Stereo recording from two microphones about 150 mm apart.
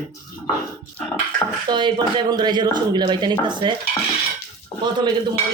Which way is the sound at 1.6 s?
30° right (ahead or behind).